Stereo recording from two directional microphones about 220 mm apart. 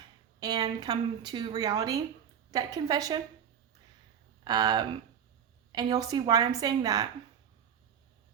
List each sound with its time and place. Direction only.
0.3 s speech: 20° right (ahead or behind)
4.4 s speech: 20° right (ahead or behind)